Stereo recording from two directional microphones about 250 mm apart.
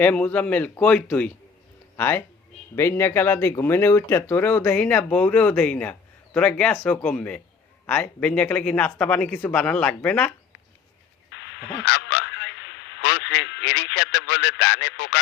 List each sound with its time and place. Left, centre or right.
0.0 s speech: centre
11.3 s speech: left